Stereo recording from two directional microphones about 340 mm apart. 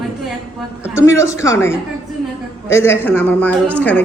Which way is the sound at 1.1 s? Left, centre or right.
Centre.